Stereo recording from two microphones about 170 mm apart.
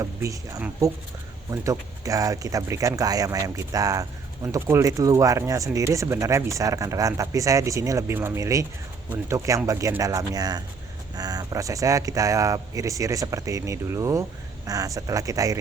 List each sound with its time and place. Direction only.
0.0 s speech: 20° right (ahead or behind)